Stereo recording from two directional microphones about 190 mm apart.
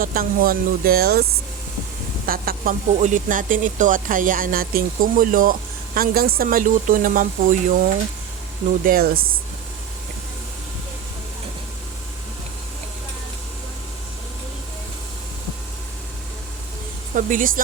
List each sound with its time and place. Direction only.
0.0 s speech: 50° right (ahead or behind)
8.8 s speech: 50° right (ahead or behind)
17.2 s speech: 45° right (ahead or behind)